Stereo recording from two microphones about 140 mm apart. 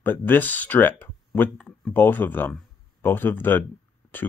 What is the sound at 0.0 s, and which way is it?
Speech, 15° left (ahead or behind).